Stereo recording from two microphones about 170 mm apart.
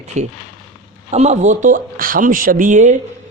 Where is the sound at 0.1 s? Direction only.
45° right (ahead or behind).